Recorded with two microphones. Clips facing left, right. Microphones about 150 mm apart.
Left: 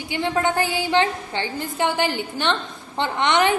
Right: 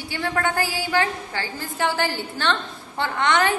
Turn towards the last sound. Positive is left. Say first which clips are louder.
# left 2 dB
turn(degrees=20)  # may be behind; listen again after turning